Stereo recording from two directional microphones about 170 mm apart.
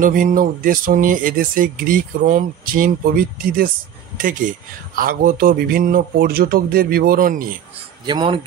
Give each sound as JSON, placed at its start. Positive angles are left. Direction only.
{"t": 0.0, "sound": "speech", "side_deg": -50}
{"t": 8.1, "sound": "speech", "side_deg": -30}